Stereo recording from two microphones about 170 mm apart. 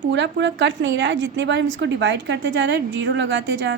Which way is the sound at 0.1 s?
90° right.